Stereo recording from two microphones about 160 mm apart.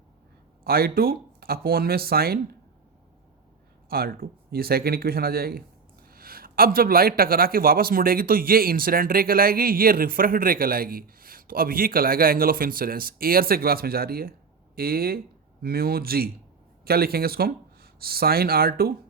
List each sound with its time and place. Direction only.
0.6 s speech: 70° right (ahead or behind)
3.8 s speech: 70° right (ahead or behind)